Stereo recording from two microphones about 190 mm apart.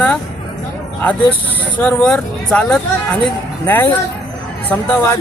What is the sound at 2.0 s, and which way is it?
Speech, 5° left (ahead or behind).